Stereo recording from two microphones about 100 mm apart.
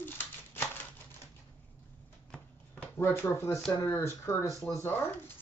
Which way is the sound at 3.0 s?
25° left (ahead or behind).